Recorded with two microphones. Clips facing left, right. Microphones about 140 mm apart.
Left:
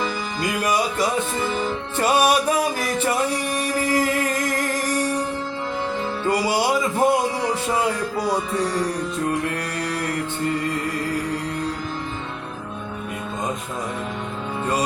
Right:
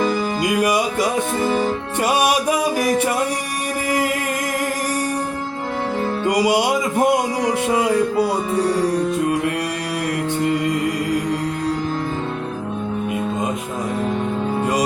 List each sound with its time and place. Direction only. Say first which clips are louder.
0.4 s music: right 2 dB; 15° right (ahead or behind)
1.4 s music: right 5 dB; 50° right (ahead or behind)
2.0 s music: even; 10° right (ahead or behind)
6.2 s music: right 3 dB; 15° right (ahead or behind)